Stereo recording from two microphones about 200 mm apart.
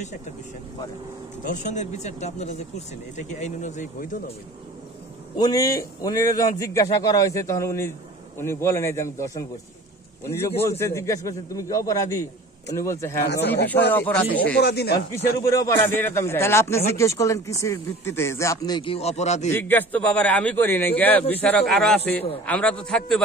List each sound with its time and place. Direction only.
1.4 s speech: 40° left (ahead or behind)
5.4 s speech: 20° left (ahead or behind)
14.6 s speech: 55° left (ahead or behind)
15.4 s speech: 15° left (ahead or behind); by 19.5 s 35° left (ahead or behind)
19.5 s a man's voice: 10° left (ahead or behind)